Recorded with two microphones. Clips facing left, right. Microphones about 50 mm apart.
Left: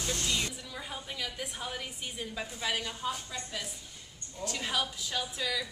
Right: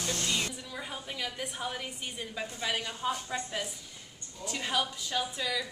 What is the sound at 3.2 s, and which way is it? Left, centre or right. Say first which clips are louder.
Speech: right 5 dB; right.